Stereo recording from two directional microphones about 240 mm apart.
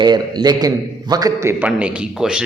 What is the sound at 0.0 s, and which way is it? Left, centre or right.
A man's voice, centre.